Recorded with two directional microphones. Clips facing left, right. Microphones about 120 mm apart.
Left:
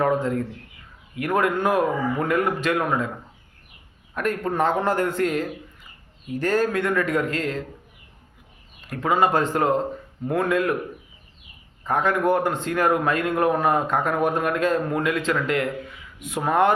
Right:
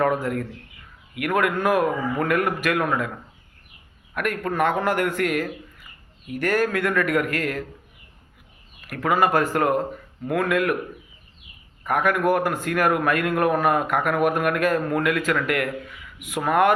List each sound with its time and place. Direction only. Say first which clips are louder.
0.0 s a man's voice: left 1 dB; 20° left (ahead or behind)
4.1 s a man's voice: left 1 dB; 25° left (ahead or behind)
8.9 s a man's voice: even; 20° left (ahead or behind)
11.8 s a man's voice: even; 25° left (ahead or behind)